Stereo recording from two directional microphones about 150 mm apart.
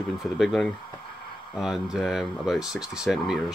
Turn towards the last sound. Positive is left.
turn(degrees=0)  # may be behind; listen again after turning